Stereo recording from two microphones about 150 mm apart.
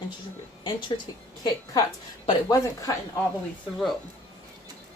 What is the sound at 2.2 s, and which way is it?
Speech, 35° left (ahead or behind).